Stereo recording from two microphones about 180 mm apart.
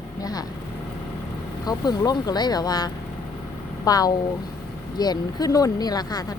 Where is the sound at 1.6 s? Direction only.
20° left (ahead or behind).